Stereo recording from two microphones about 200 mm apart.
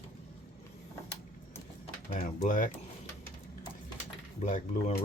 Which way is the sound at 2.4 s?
40° left (ahead or behind).